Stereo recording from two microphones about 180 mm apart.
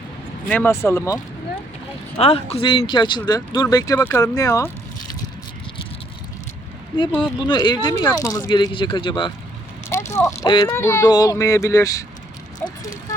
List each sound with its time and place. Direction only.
0.4 s speech: 10° left (ahead or behind)
2.1 s speech: 35° left (ahead or behind); by 4.7 s 20° left (ahead or behind)
7.2 s speech: 25° left (ahead or behind)
12.6 s vehicle: 10° left (ahead or behind)